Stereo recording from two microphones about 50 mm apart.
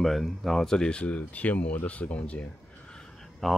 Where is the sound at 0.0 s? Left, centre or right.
Centre; by 2.4 s left.